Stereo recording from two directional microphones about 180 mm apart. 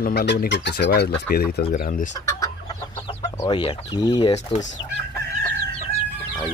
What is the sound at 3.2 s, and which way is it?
Speech, 25° left (ahead or behind).